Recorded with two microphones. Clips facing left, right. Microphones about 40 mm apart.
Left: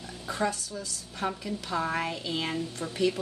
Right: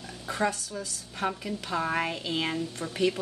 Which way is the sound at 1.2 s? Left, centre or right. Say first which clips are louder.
Right 1 dB; centre.